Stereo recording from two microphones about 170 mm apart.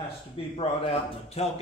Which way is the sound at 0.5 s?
35° left (ahead or behind).